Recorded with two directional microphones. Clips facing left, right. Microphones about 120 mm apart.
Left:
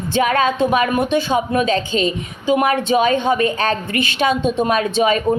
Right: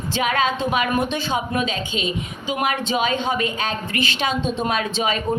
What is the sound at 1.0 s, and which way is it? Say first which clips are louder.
Speech: left 6 dB; 45° left (ahead or behind).